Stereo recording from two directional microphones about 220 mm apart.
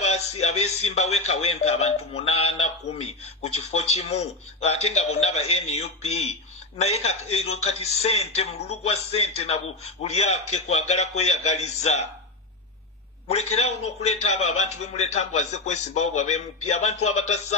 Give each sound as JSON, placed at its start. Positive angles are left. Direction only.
{"t": 0.5, "sound": "a man's voice", "side_deg": 30}
{"t": 13.3, "sound": "a man's voice", "side_deg": 30}
{"t": 14.4, "sound": "a man's voice", "side_deg": 75}
{"t": 14.8, "sound": "a man's voice", "side_deg": 30}
{"t": 17.0, "sound": "speech", "side_deg": 80}